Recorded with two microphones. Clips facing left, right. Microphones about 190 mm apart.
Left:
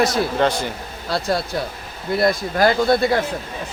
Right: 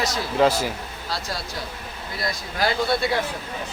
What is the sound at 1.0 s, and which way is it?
A man's voice, 60° left (ahead or behind).